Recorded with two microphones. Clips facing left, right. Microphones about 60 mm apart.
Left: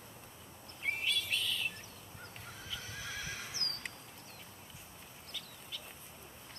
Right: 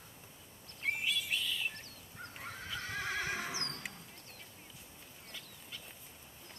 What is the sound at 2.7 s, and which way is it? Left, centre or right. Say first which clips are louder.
Horse: right 7 dB; right.